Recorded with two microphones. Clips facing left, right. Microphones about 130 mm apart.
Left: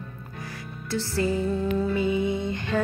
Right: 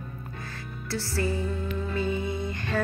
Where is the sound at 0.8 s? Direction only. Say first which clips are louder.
Left 3 dB; 20° left (ahead or behind).